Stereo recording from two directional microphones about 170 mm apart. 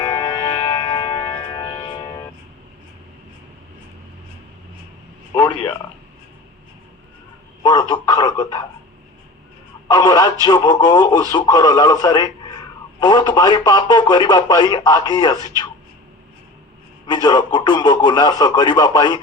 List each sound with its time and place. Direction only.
0.0 s music: 25° left (ahead or behind)
7.6 s a sound: 20° left (ahead or behind)
9.9 s speech: 20° left (ahead or behind)
17.1 s speech: 25° left (ahead or behind)